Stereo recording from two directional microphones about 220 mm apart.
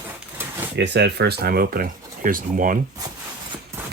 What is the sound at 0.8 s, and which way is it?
Speech, 50° right (ahead or behind).